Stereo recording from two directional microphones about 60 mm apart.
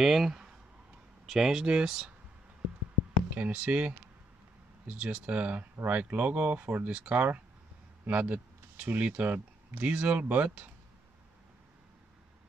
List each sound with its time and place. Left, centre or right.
0.0 s speech: centre
3.3 s speech: right
8.1 s a sound: right
8.8 s speech: right